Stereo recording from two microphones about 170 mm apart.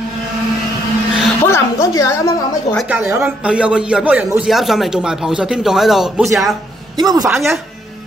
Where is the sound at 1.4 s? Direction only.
15° left (ahead or behind).